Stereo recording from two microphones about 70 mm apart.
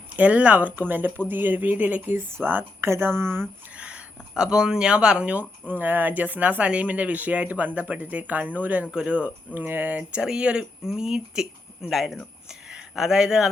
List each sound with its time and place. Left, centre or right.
0.2 s speech: right
3.8 s speech: centre